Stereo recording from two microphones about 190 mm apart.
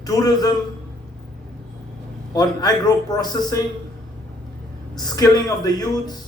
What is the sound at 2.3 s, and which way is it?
A man's voice, 20° left (ahead or behind).